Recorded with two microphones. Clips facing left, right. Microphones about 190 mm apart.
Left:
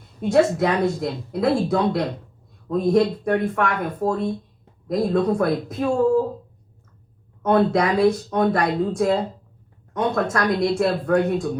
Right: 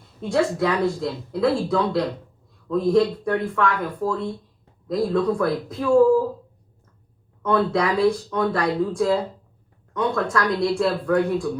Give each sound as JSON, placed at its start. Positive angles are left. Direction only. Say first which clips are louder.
{"t": 0.2, "sound": "speech", "louder": "left 3 dB", "side_deg": 20}
{"t": 7.4, "sound": "speech", "louder": "left 2 dB", "side_deg": 20}